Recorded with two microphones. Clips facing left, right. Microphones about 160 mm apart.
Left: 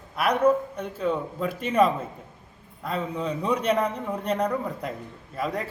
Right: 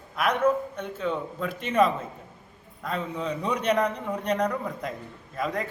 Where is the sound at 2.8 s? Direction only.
5° left (ahead or behind).